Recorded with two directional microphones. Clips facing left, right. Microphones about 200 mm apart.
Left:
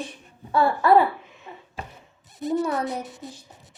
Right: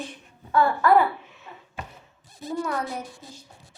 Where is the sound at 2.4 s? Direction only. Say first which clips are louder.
Left 4 dB; 20° left (ahead or behind).